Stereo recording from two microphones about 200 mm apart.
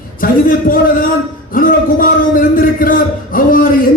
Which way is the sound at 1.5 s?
45° left (ahead or behind).